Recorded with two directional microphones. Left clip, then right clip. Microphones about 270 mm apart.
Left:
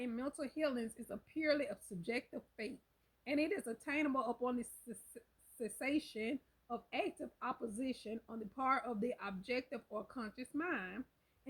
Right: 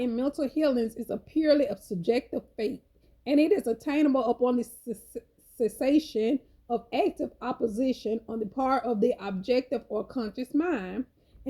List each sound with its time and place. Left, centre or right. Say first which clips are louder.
0.0 s speech: right 14 dB; centre